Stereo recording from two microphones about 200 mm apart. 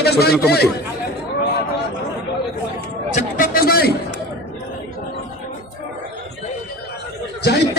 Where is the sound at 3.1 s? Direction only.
45° left (ahead or behind).